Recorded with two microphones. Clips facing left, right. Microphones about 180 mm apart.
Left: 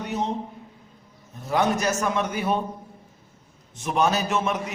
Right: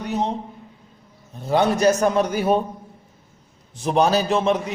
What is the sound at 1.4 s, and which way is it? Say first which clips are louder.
A man's voice: right 5 dB; 30° right (ahead or behind).